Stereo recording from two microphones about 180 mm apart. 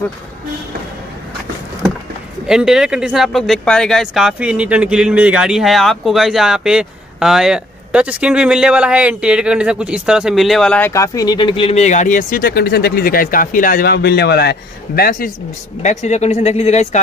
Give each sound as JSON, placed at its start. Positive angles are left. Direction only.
{"t": 2.4, "sound": "speech", "side_deg": -5}
{"t": 10.9, "sound": "speech", "side_deg": 20}
{"t": 15.8, "sound": "speech", "side_deg": 40}